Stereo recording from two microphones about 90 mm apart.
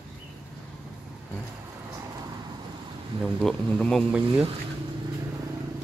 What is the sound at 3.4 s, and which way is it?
Speech, 5° left (ahead or behind).